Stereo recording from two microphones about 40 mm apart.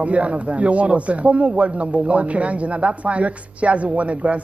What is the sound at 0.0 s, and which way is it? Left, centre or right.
A man's voice, right.